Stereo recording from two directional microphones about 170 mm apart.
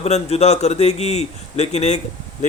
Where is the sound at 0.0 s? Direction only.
40° left (ahead or behind).